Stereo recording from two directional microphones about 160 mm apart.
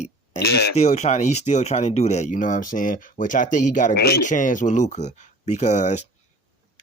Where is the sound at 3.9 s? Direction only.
90° left.